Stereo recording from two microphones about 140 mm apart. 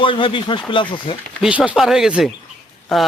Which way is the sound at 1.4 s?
10° right (ahead or behind).